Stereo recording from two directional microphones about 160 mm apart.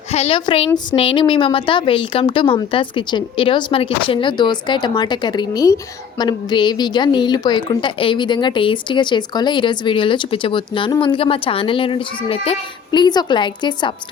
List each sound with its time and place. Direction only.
0.1 s a woman's voice: 40° left (ahead or behind)